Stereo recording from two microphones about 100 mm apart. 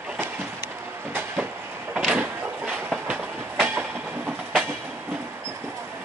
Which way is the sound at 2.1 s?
20° right (ahead or behind).